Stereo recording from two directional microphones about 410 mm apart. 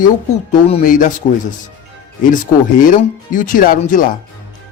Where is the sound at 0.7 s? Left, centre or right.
Centre.